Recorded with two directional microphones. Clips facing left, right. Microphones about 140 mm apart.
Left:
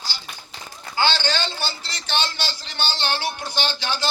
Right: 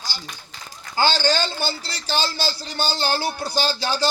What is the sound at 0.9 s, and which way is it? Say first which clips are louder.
A man's voice: right 3 dB; 40° right (ahead or behind).